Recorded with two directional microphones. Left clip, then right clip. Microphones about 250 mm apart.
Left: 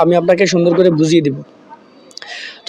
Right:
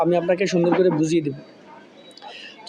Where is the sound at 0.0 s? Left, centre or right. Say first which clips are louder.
Left 8 dB; left.